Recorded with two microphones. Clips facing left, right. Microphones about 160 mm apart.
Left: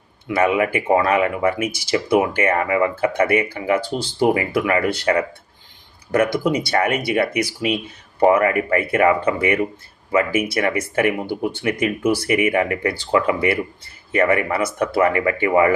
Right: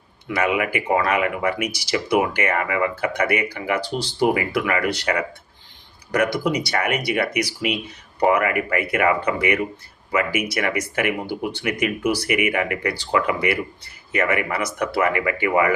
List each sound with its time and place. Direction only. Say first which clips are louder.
0.3 s speech: left 4 dB; 30° left (ahead or behind)
3.9 s speech: left 2 dB; 15° right (ahead or behind)
4.4 s speech: left 3 dB; 30° left (ahead or behind)
6.5 s speech: left 3 dB; 30° left (ahead or behind)